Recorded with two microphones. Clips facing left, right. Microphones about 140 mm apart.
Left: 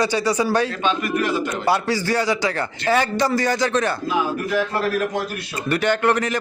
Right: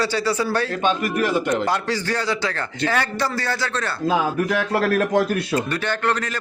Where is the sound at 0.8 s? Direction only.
45° right (ahead or behind).